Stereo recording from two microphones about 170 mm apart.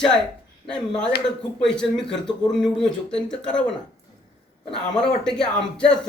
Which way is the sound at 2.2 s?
25° left (ahead or behind).